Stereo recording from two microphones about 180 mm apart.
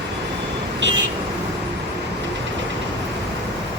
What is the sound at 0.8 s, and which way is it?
Vehicle, 80° right.